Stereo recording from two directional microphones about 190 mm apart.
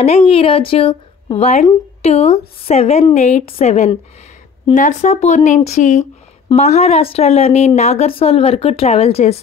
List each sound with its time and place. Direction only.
0.0 s speech: 30° left (ahead or behind)